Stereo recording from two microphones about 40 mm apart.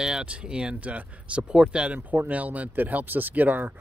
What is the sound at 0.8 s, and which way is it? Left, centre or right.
Speech, right.